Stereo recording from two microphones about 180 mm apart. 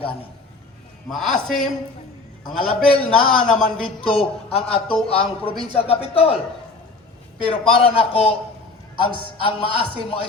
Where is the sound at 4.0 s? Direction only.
30° left (ahead or behind).